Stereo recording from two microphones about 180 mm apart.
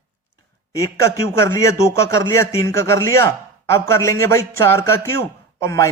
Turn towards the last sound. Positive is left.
turn(degrees=15)  # may be behind; listen again after turning